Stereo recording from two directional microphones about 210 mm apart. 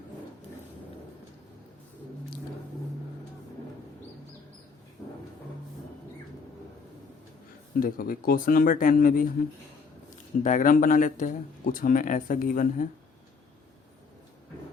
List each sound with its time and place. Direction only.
5.0 s music: 15° left (ahead or behind)
7.8 s speech: 40° left (ahead or behind)
10.4 s speech: 40° left (ahead or behind)